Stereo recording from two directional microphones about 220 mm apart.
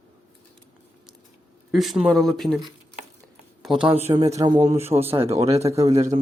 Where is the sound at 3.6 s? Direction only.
Centre (ahead or behind).